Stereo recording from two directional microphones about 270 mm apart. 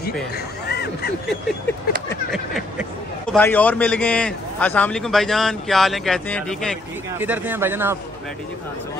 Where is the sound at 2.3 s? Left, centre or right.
Centre.